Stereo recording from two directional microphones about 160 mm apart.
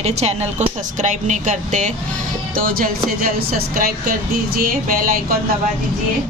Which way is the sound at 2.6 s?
60° right (ahead or behind).